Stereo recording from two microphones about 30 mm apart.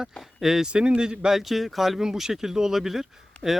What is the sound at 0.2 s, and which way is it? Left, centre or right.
Speech, centre.